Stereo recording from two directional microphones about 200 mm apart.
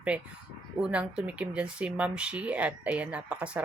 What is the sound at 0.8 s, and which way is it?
Speech, 5° right (ahead or behind).